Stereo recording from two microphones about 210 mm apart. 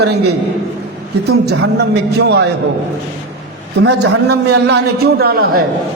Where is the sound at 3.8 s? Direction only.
50° right (ahead or behind).